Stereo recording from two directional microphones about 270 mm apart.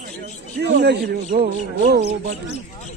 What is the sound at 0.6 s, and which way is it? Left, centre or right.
Speech, right.